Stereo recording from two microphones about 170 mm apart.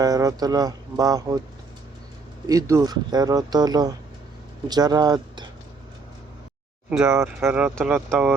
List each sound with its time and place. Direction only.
0.0 s speech: 20° right (ahead or behind)
2.5 s speech: 20° right (ahead or behind)
6.9 s speech: 5° right (ahead or behind)